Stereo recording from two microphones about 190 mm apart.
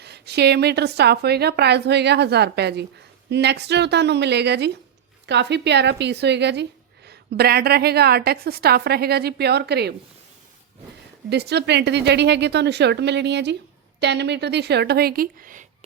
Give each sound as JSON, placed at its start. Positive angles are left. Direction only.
{"t": 0.0, "sound": "a woman's voice", "side_deg": -60}
{"t": 11.3, "sound": "a woman's voice", "side_deg": -60}